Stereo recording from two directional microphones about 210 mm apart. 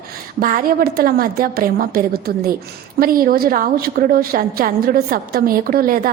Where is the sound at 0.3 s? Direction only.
40° right (ahead or behind).